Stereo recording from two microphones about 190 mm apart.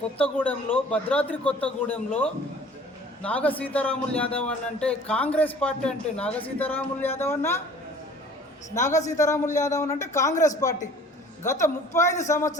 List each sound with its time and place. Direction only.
0.2 s a man's voice: 10° left (ahead or behind)
8.8 s a man's voice: 15° left (ahead or behind)
11.4 s a man's voice: 15° left (ahead or behind)